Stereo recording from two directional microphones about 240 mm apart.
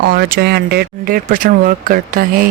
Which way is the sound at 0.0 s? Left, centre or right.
Right.